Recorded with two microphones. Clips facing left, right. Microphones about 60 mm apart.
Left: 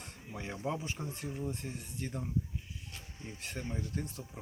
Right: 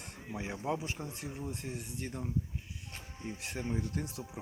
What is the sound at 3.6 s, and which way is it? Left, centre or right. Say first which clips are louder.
Speech: right 2 dB; centre.